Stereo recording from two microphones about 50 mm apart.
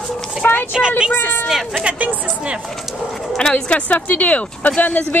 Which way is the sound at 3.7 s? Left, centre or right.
Left.